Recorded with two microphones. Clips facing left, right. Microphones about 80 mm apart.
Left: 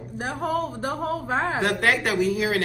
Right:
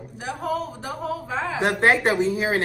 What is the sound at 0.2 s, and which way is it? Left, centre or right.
A woman's voice, left.